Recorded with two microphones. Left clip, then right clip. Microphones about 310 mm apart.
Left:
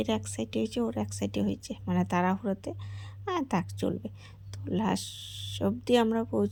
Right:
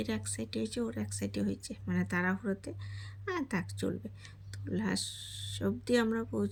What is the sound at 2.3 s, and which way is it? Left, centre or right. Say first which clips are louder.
Speech: left 4 dB; left.